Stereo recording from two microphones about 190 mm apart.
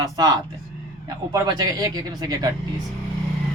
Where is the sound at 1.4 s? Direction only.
20° right (ahead or behind).